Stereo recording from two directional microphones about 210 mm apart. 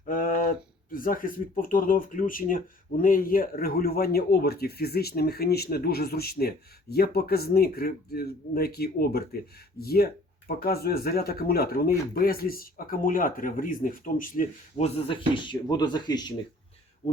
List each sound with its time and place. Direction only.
0.1 s speech: 40° left (ahead or behind); by 16.3 s 20° left (ahead or behind)